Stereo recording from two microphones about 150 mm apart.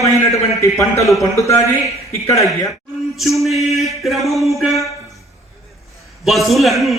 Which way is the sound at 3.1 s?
Centre (ahead or behind).